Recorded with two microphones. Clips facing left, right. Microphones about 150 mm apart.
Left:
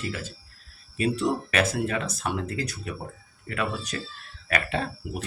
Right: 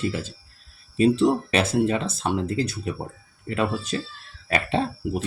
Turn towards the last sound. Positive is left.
turn(degrees=-30)  # may be behind; listen again after turning